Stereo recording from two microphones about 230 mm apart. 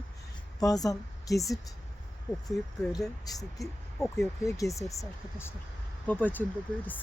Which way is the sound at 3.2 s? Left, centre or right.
Centre.